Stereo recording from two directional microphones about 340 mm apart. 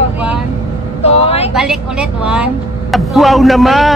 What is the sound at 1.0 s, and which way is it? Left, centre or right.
Vehicle, centre.